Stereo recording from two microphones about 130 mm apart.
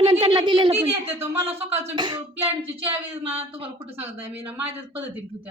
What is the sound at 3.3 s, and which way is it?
Speech, 50° right (ahead or behind).